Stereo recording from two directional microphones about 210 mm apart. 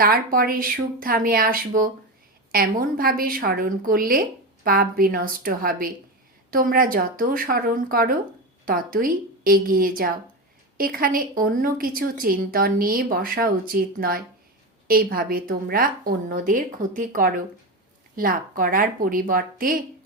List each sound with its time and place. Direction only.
0.0 s a woman's voice: 45° right (ahead or behind)